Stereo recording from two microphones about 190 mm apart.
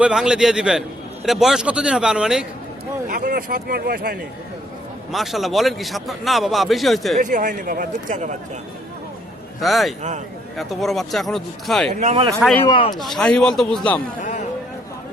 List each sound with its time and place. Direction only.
0.0 s a man's voice: 5° right (ahead or behind)
3.1 s speech: 50° right (ahead or behind)
5.1 s a man's voice: centre (ahead or behind)
7.2 s speech: 45° right (ahead or behind)
9.6 s a man's voice: centre (ahead or behind)
11.9 s speech: 35° right (ahead or behind)
12.4 s a man's voice: centre (ahead or behind)
12.6 s speech: 25° left (ahead or behind)
13.0 s a man's voice: centre (ahead or behind)
14.2 s speech: 40° left (ahead or behind)